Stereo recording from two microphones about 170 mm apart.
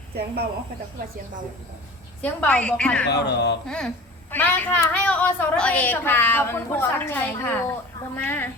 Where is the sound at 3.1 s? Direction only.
85° left.